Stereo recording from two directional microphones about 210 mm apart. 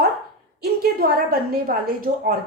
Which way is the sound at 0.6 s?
45° right (ahead or behind).